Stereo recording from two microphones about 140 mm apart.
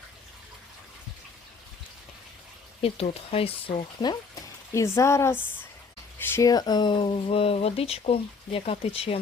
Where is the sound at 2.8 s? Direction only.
45° left (ahead or behind).